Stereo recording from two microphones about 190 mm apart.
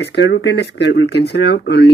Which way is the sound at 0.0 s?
65° left (ahead or behind).